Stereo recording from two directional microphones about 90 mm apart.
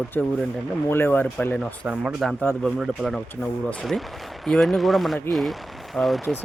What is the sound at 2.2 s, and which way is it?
Speech, centre (ahead or behind).